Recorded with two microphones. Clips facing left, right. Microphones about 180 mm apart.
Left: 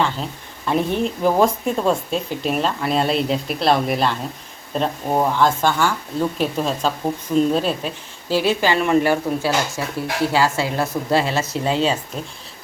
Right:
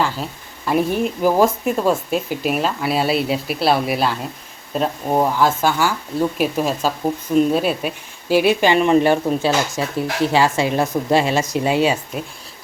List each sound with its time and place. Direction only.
0.0 s a woman's voice: 5° right (ahead or behind)